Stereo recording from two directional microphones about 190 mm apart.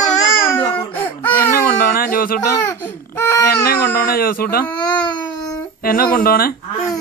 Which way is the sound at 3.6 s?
55° left (ahead or behind).